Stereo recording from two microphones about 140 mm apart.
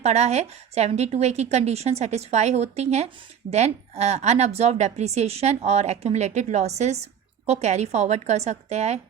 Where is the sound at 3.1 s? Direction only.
35° right (ahead or behind).